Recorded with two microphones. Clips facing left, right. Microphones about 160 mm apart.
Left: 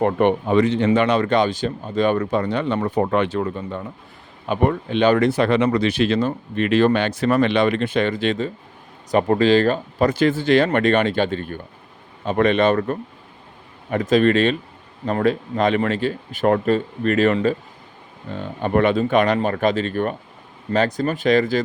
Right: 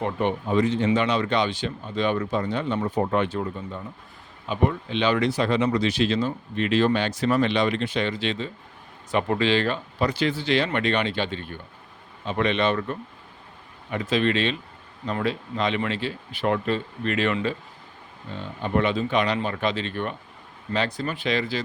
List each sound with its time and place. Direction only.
0.0 s speech: 60° left (ahead or behind)
0.9 s speech: 55° left (ahead or behind); by 3.8 s 70° left (ahead or behind)
4.4 s speech: 55° left (ahead or behind)